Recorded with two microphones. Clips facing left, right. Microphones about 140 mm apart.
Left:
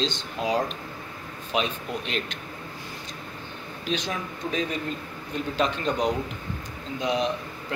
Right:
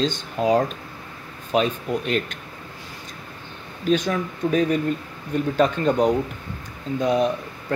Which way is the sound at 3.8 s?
45° right (ahead or behind).